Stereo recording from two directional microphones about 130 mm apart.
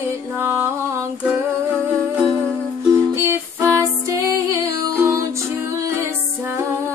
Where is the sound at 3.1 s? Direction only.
20° right (ahead or behind).